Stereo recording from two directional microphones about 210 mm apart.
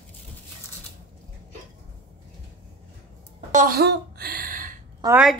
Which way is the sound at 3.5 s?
45° right (ahead or behind).